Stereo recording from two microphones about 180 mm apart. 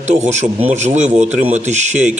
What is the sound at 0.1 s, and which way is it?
Speech, 40° right (ahead or behind).